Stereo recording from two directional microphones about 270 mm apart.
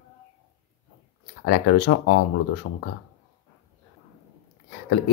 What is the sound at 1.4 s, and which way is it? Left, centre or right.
Speech, left.